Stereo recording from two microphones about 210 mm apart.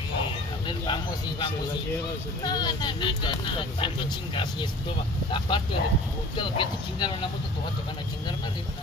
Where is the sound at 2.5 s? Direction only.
20° left (ahead or behind).